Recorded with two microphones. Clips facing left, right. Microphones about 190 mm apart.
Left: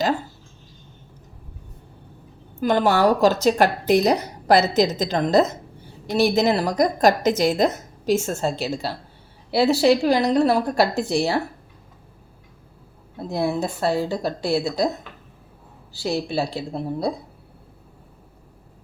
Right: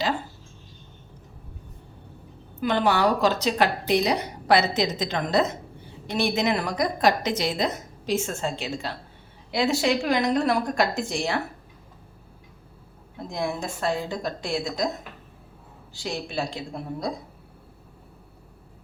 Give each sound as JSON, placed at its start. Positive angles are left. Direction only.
{"t": 2.6, "sound": "a woman's voice", "side_deg": 45}
{"t": 13.1, "sound": "a woman's voice", "side_deg": 35}
{"t": 16.0, "sound": "a woman's voice", "side_deg": 35}